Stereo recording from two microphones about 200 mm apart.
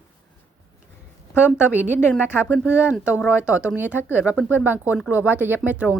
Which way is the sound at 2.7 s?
5° right (ahead or behind).